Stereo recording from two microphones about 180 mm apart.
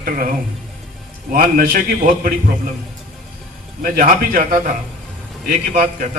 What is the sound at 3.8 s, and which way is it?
A man's voice, 50° right (ahead or behind).